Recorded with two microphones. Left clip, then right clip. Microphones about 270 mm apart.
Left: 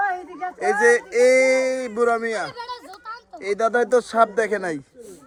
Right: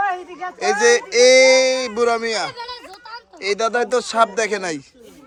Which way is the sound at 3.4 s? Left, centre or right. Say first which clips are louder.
Right 1 dB; centre.